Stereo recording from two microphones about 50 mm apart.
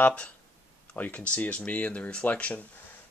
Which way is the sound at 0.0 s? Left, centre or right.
Left.